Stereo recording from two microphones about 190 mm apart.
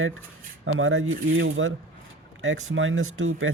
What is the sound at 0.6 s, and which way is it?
Speech, 90° right.